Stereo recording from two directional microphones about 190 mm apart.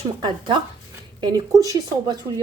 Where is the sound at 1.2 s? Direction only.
20° right (ahead or behind).